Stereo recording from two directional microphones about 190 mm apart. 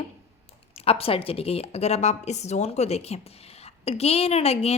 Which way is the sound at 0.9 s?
30° left (ahead or behind).